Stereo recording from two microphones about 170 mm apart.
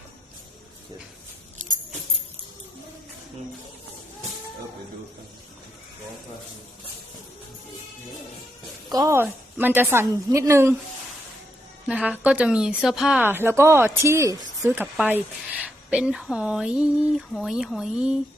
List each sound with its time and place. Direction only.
8.9 s a woman's voice: 20° right (ahead or behind)
11.9 s a woman's voice: 10° right (ahead or behind)